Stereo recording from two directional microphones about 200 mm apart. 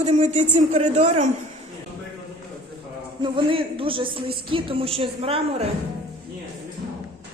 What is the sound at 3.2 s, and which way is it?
A woman's voice, 25° right (ahead or behind).